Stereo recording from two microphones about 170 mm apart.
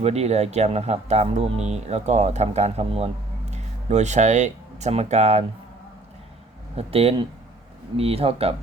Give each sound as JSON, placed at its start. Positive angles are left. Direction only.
{"t": 0.0, "sound": "speech", "side_deg": -40}
{"t": 6.7, "sound": "speech", "side_deg": -35}